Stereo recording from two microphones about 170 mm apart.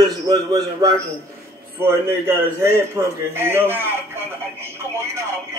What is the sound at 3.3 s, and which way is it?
Speech, 15° right (ahead or behind).